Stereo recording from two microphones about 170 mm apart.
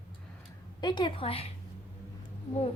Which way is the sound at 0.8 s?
25° left (ahead or behind).